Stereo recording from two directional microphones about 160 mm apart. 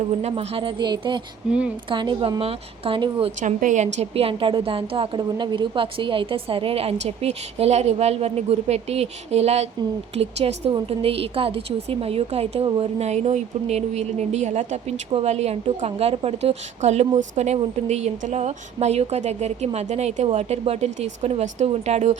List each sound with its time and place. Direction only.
0.2 s a woman's voice: 40° right (ahead or behind)
1.5 s speech: 5° right (ahead or behind)
1.9 s a woman's voice: 30° right (ahead or behind)
3.4 s a woman's voice: 50° right (ahead or behind); by 12.9 s 35° right (ahead or behind)
13.0 s speech: 45° right (ahead or behind)